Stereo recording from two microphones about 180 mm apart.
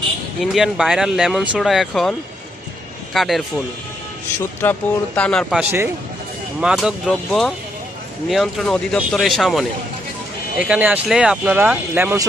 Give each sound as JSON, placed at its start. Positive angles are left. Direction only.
{"t": 0.4, "sound": "speech", "side_deg": -5}
{"t": 4.4, "sound": "speech", "side_deg": 10}
{"t": 5.5, "sound": "speech", "side_deg": -15}